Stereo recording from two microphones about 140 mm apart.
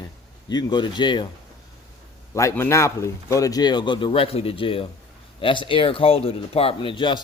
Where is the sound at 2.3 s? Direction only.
20° left (ahead or behind).